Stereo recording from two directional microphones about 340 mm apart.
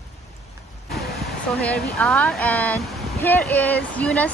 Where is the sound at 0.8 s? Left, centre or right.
Centre.